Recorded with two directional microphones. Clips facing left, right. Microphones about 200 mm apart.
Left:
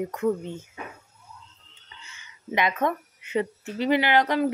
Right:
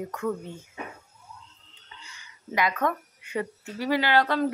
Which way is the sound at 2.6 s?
20° left (ahead or behind).